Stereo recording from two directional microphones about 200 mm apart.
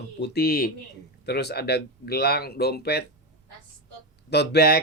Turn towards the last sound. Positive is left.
turn(degrees=55)  # may be behind; listen again after turning